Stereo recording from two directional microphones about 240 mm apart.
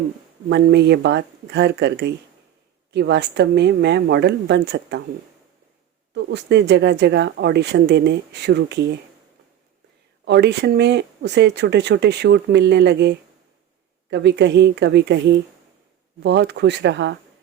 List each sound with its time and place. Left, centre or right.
0.5 s speech: right
6.1 s speech: right
10.2 s speech: right